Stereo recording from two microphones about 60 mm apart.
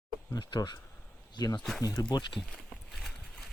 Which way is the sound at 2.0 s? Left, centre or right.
Left.